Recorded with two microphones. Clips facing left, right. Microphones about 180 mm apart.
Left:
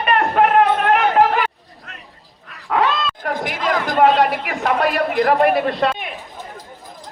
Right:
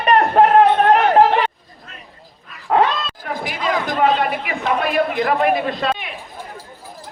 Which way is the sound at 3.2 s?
70° left (ahead or behind).